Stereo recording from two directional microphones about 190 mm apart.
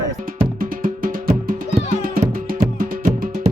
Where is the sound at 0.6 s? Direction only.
45° right (ahead or behind).